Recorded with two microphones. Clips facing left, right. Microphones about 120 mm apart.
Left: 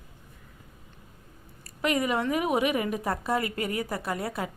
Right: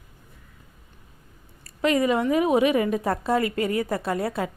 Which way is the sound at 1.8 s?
30° right (ahead or behind).